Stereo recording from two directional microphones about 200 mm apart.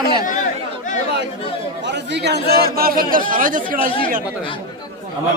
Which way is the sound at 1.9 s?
60° right (ahead or behind).